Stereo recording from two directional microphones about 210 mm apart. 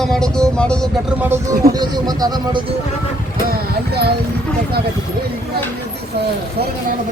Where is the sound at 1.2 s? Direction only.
15° right (ahead or behind).